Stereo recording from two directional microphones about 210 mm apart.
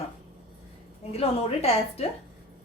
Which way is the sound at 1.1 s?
30° left (ahead or behind).